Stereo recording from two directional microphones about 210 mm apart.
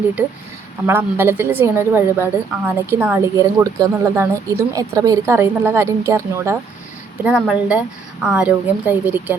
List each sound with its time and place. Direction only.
0.9 s a woman's voice: 10° right (ahead or behind)